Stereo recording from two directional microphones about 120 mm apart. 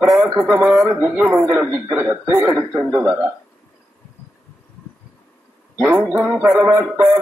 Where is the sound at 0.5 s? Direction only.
15° right (ahead or behind).